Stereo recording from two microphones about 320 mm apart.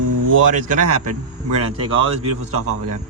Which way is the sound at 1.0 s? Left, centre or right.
Right.